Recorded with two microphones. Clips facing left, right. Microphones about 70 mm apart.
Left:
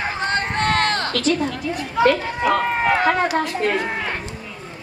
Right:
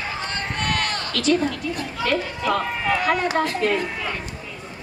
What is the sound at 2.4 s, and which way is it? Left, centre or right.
Run, left.